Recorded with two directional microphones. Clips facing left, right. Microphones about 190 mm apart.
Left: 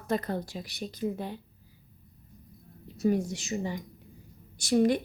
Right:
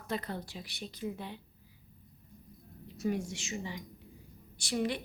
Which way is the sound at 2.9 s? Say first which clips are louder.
Left 7 dB; 35° left (ahead or behind).